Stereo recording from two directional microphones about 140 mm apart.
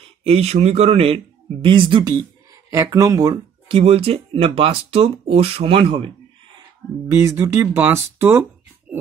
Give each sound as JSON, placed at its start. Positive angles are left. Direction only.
{"t": 0.0, "sound": "speech", "side_deg": -45}
{"t": 3.6, "sound": "speech", "side_deg": -40}
{"t": 7.1, "sound": "speech", "side_deg": -20}
{"t": 8.9, "sound": "a sound", "side_deg": -10}